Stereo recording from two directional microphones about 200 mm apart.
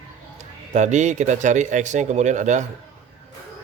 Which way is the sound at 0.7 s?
35° right (ahead or behind).